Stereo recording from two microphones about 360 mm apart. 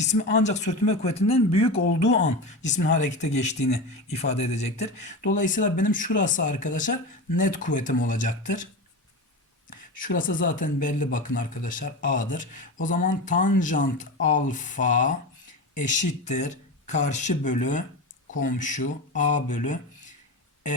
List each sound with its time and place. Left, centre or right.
0.1 s speech: centre
9.6 s speech: left